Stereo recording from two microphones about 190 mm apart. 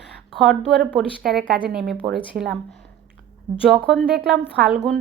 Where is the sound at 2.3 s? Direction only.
50° right (ahead or behind).